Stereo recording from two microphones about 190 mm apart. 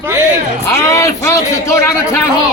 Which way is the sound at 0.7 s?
15° left (ahead or behind).